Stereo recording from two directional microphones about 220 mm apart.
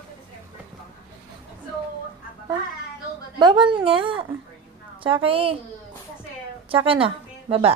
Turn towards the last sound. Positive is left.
turn(degrees=-25)  # may be behind; listen again after turning